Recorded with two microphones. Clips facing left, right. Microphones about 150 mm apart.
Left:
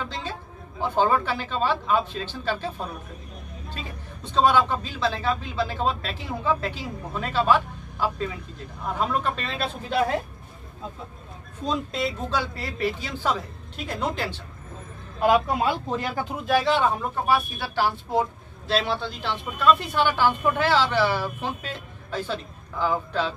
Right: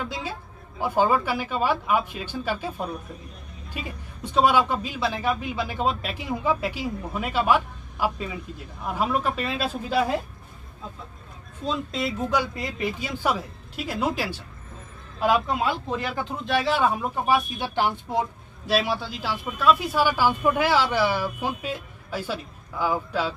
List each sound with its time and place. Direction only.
0.1 s speech: 10° right (ahead or behind)
11.9 s speech: centre (ahead or behind)
12.3 s speech: 15° right (ahead or behind)
16.3 s speech: centre (ahead or behind)